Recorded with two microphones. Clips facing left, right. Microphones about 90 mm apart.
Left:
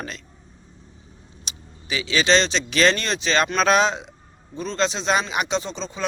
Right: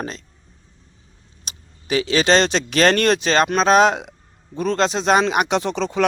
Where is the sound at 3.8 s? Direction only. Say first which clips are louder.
Right 6 dB; 60° right (ahead or behind).